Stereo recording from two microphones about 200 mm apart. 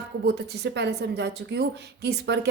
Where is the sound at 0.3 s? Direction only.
55° right (ahead or behind).